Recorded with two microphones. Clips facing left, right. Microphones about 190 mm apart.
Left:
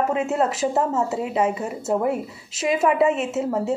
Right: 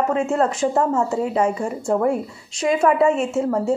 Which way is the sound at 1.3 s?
5° left (ahead or behind).